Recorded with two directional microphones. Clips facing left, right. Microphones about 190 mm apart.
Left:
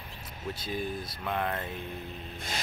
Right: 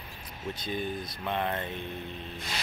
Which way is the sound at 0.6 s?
5° left (ahead or behind).